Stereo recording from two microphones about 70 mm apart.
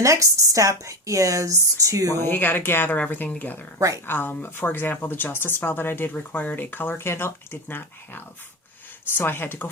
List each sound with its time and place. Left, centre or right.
0.0 s speech: right
2.1 s speech: left
3.8 s speech: right
4.0 s speech: left